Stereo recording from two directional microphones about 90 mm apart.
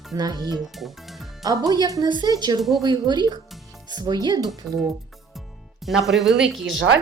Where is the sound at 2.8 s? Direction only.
50° right (ahead or behind).